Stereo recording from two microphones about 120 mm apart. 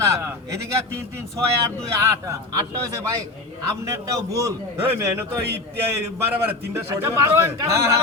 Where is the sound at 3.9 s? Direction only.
25° right (ahead or behind).